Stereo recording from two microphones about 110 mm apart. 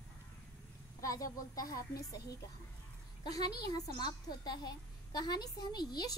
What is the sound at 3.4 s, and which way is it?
A woman's voice, 40° left (ahead or behind).